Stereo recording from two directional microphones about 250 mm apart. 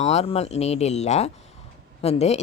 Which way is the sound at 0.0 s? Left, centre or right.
Left.